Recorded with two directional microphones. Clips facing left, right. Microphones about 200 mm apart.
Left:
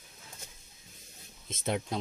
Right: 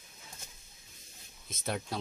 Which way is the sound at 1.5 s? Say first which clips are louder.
Left 4 dB; 20° left (ahead or behind).